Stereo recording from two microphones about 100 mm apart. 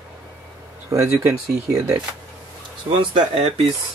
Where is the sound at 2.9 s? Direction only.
60° right (ahead or behind).